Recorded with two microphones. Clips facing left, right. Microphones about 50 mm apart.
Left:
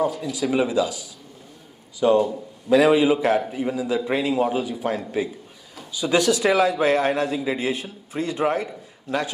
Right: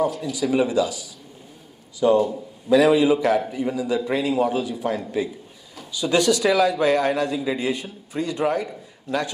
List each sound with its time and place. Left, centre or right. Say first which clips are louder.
0.0 s a man's voice: right 1 dB; centre
2.0 s a man's voice: even; centre